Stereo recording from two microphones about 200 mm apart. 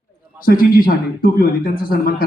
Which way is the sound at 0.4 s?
45° left (ahead or behind).